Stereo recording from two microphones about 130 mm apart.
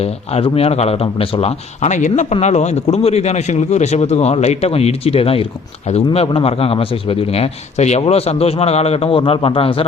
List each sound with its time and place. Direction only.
0.0 s a man's voice: 50° left (ahead or behind); by 2.2 s 70° left (ahead or behind)
2.3 s a man's voice: 60° left (ahead or behind)